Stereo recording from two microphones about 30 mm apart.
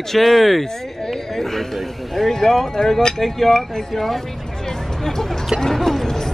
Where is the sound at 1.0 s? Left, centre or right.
Centre.